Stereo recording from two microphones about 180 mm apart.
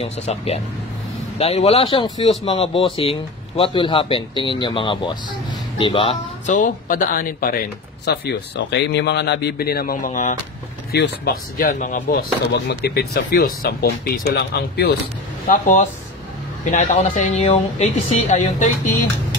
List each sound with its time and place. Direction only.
0.0 s speech: 35° left (ahead or behind)
10.9 s speech: 65° left (ahead or behind)
15.5 s speech: 45° left (ahead or behind)